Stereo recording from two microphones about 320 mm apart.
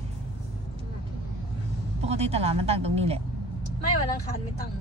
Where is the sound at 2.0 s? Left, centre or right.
Centre.